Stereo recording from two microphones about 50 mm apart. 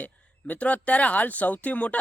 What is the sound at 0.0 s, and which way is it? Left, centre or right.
Speech, left.